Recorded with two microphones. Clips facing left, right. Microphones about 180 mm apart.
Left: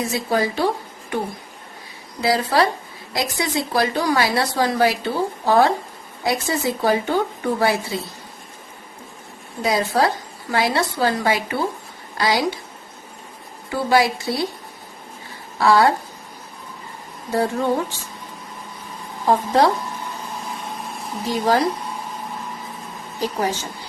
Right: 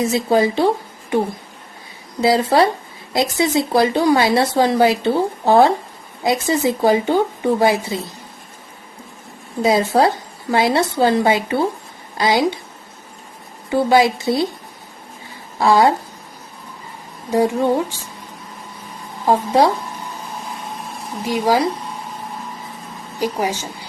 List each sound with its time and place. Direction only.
0.0 s speech: 25° right (ahead or behind)
2.2 s speech: 25° right (ahead or behind)
9.6 s a woman's voice: 25° right (ahead or behind)
13.7 s speech: 20° right (ahead or behind)
15.5 s a woman's voice: 20° right (ahead or behind)
17.3 s speech: 15° right (ahead or behind)
19.3 s speech: 15° right (ahead or behind)
21.2 s speech: 10° right (ahead or behind)
23.2 s speech: 10° right (ahead or behind)